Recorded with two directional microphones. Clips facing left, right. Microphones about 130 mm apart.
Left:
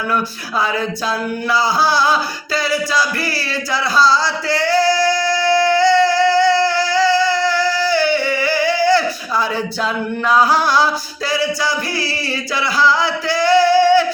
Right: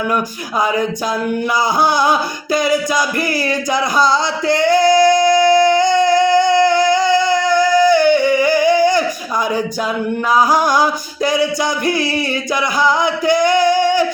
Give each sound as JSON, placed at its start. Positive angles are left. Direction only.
{"t": 1.8, "sound": "music", "side_deg": -20}
{"t": 3.7, "sound": "singing", "side_deg": -20}
{"t": 6.9, "sound": "a sound", "side_deg": -20}
{"t": 7.9, "sound": "singing", "side_deg": -15}
{"t": 8.4, "sound": "a sound", "side_deg": -15}
{"t": 10.3, "sound": "music", "side_deg": -15}
{"t": 12.8, "sound": "music", "side_deg": -20}